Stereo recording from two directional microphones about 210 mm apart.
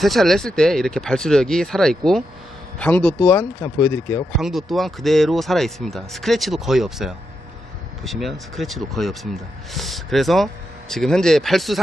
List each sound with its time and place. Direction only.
0.0 s speech: centre (ahead or behind)
4.4 s speech: centre (ahead or behind)